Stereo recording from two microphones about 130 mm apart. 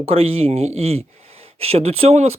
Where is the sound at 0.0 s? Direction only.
50° right (ahead or behind).